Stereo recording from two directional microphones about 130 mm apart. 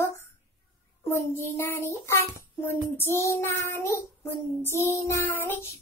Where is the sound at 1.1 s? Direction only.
20° left (ahead or behind).